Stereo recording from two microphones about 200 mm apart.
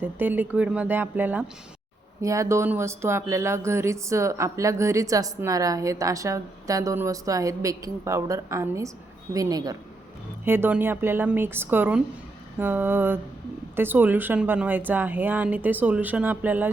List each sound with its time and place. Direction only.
0.0 s speech: 10° right (ahead or behind)